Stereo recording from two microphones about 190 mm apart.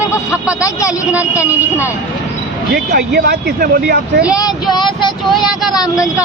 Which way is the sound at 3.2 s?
60° right (ahead or behind).